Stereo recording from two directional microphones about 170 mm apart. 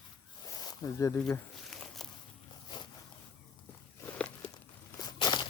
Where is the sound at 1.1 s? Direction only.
5° left (ahead or behind).